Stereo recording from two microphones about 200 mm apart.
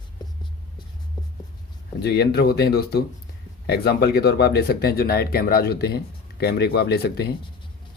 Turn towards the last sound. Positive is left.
turn(degrees=55)  # may be behind; listen again after turning